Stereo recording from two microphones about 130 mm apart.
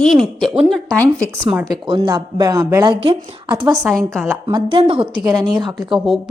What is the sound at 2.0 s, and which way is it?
Speech, 30° right (ahead or behind).